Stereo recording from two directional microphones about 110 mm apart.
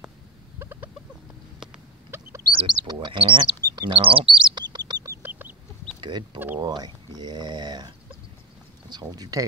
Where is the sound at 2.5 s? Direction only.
45° right (ahead or behind).